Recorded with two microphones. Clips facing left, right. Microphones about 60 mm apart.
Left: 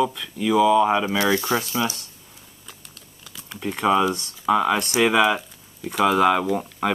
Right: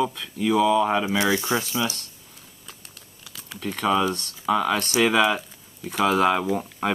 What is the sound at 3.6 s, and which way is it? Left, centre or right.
Speech, centre.